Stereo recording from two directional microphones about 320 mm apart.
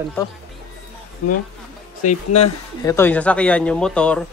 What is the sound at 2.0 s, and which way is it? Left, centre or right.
Speech, centre.